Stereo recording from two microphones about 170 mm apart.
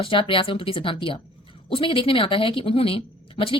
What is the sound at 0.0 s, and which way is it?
A woman's voice, 30° left (ahead or behind).